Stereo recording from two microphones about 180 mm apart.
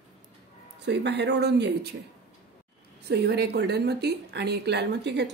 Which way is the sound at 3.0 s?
65° right (ahead or behind).